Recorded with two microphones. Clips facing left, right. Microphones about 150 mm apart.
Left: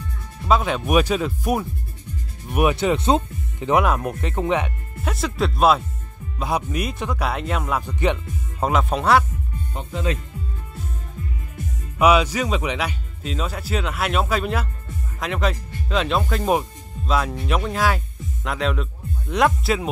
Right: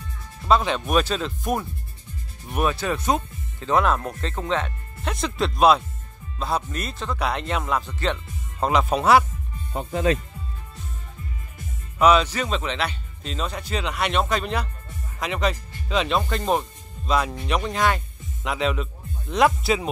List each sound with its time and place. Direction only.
0.5 s speech: 5° left (ahead or behind)
8.6 s speech: centre (ahead or behind)
9.8 s speech: 45° right (ahead or behind)
12.0 s speech: 10° left (ahead or behind)